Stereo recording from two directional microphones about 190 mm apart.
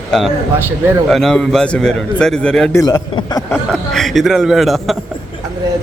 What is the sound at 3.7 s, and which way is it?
A man's voice, 5° left (ahead or behind).